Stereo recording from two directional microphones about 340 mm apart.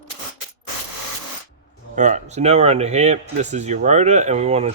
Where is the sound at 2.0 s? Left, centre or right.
Right.